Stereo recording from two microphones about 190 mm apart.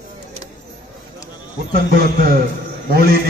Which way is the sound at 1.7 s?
50° right (ahead or behind).